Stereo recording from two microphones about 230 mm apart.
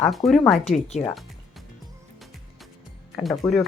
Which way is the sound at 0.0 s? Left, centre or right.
Centre.